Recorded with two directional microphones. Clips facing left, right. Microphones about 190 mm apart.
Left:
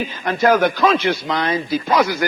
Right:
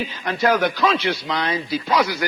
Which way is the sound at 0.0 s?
50° left (ahead or behind).